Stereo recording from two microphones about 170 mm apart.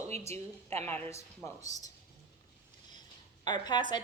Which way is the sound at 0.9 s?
15° left (ahead or behind).